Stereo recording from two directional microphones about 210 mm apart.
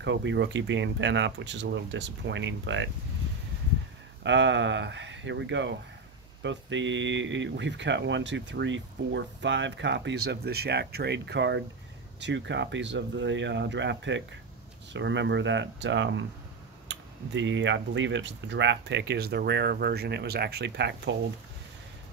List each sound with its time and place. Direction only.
0.0 s speech: 60° right (ahead or behind)
4.2 s speech: 60° right (ahead or behind)